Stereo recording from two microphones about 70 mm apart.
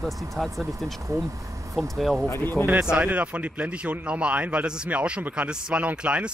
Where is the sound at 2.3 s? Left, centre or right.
Left.